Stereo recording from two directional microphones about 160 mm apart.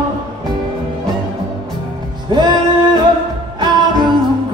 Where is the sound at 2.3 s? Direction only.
30° right (ahead or behind).